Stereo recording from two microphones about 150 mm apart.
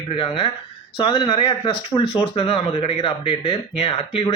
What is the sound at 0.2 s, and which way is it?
Speech, 35° left (ahead or behind).